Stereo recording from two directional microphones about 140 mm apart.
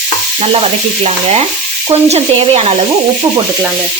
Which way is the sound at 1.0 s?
45° right (ahead or behind).